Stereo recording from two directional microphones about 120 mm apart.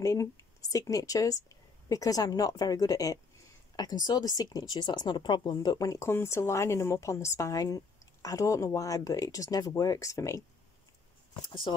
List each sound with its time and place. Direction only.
0.0 s speech: 25° left (ahead or behind)
11.4 s speech: 40° left (ahead or behind)